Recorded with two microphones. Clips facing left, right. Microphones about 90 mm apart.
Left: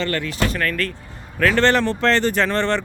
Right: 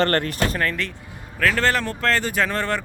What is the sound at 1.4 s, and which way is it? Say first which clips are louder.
Speech: left 4 dB; centre (ahead or behind).